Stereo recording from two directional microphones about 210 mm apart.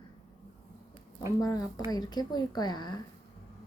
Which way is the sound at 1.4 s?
15° left (ahead or behind).